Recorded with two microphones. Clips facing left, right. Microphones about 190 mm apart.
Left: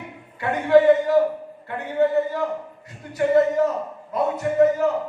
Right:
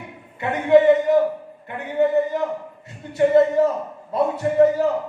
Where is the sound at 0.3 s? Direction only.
20° right (ahead or behind).